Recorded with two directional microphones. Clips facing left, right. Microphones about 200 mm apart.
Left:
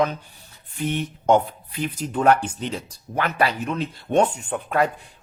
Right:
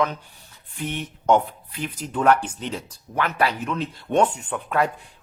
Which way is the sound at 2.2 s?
30° left (ahead or behind).